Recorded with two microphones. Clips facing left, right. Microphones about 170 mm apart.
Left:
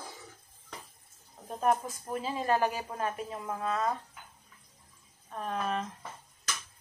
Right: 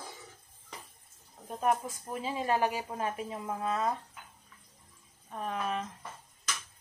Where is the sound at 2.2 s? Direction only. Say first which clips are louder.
Left 1 dB; 20° right (ahead or behind).